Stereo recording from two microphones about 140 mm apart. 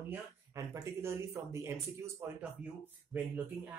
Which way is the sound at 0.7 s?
20° right (ahead or behind).